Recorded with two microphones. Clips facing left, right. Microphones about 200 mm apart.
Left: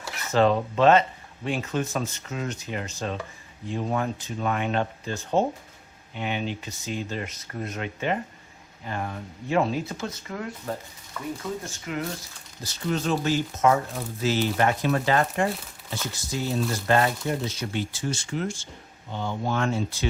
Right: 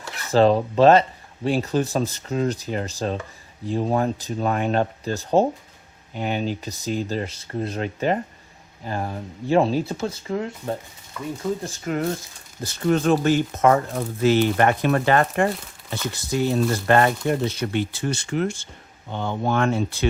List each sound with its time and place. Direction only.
0.3 s speech: 35° right (ahead or behind)
11.6 s speech: 40° right (ahead or behind)
12.6 s speech: 55° right (ahead or behind)